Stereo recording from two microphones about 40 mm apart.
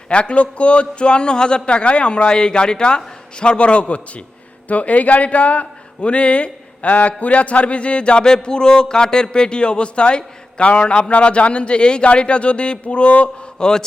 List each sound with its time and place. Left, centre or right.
0.1 s a man's voice: left